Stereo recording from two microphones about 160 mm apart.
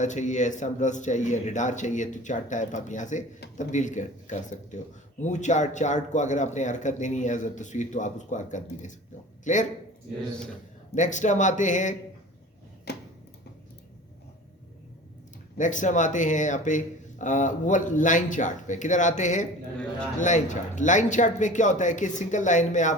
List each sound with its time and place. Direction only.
0.0 s speech: 50° left (ahead or behind)
10.9 s speech: 50° left (ahead or behind)
12.9 s a sound: 90° left
15.5 s speech: 50° left (ahead or behind)